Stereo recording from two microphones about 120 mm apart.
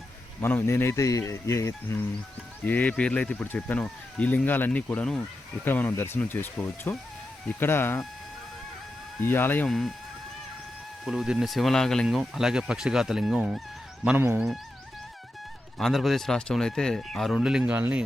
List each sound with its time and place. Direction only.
0.4 s speech: 20° left (ahead or behind)
2.6 s speech: 15° left (ahead or behind)
9.2 s speech: 20° left (ahead or behind)
9.6 s speech: centre (ahead or behind)
11.0 s speech: 5° right (ahead or behind)
15.8 s speech: centre (ahead or behind)